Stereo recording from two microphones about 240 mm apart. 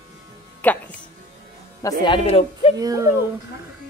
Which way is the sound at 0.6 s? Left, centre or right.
Centre.